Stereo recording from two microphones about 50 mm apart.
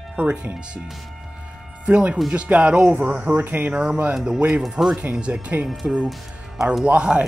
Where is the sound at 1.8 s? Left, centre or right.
Right.